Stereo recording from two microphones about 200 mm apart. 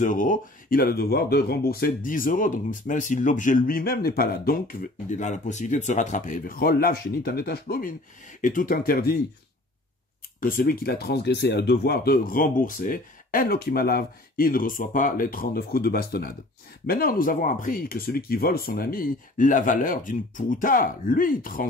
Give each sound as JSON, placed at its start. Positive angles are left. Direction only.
{"t": 0.0, "sound": "speech", "side_deg": 40}
{"t": 10.4, "sound": "speech", "side_deg": 45}